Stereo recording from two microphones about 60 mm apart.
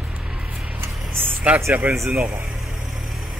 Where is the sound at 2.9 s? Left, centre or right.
Centre.